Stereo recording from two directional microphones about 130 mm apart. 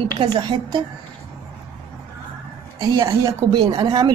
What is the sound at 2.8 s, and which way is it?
A woman's voice, 25° right (ahead or behind).